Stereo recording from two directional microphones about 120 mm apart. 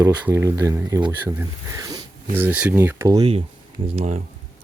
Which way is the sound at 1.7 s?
30° right (ahead or behind).